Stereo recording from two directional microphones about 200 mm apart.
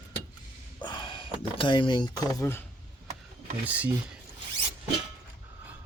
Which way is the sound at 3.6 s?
5° right (ahead or behind).